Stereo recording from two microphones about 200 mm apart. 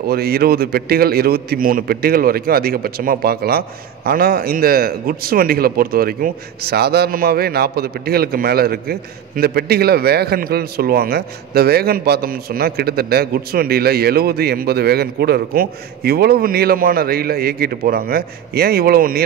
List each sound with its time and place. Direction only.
0.0 s a man's voice: 50° right (ahead or behind)